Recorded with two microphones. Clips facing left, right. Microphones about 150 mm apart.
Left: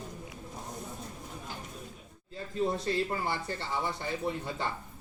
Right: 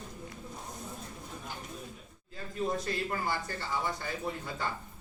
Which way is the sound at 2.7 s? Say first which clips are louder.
Left 3 dB; 30° left (ahead or behind).